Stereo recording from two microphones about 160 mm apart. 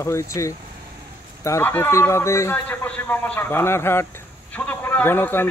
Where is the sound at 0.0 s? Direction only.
20° left (ahead or behind).